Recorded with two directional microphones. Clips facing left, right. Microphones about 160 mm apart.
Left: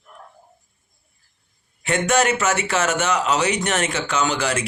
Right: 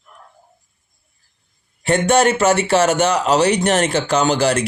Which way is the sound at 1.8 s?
30° right (ahead or behind).